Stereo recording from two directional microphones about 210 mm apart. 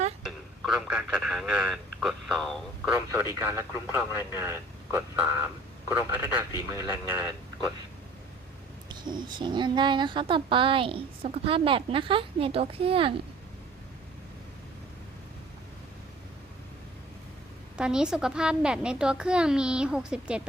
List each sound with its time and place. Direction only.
0.3 s a man's voice: centre (ahead or behind)
8.9 s speech: 20° right (ahead or behind)
17.7 s speech: 5° right (ahead or behind)